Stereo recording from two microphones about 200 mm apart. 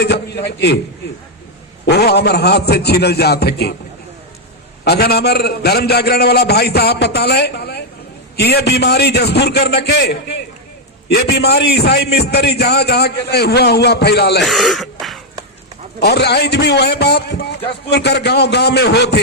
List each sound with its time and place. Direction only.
0.0 s a man's voice: 55° left (ahead or behind)
1.9 s a man's voice: 55° left (ahead or behind)
4.9 s a man's voice: 55° left (ahead or behind)
14.4 s speech: centre (ahead or behind)
16.0 s a man's voice: 55° left (ahead or behind)